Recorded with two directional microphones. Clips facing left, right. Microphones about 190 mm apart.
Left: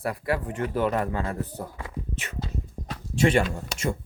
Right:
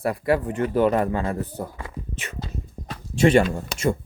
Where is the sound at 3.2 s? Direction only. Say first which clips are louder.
Right 5 dB; 30° right (ahead or behind).